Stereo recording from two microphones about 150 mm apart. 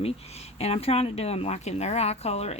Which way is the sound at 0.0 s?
45° left (ahead or behind).